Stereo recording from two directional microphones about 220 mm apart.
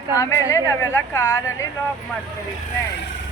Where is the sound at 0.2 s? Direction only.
15° left (ahead or behind).